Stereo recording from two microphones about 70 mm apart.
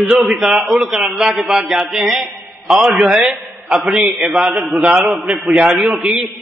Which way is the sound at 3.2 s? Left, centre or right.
Centre.